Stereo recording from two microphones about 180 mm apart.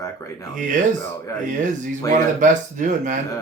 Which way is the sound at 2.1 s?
45° right (ahead or behind).